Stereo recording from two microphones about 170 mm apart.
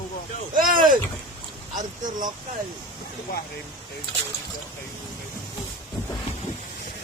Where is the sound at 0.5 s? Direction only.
55° right (ahead or behind).